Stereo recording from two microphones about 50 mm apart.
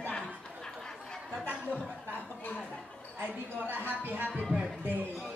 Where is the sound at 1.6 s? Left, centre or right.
Left.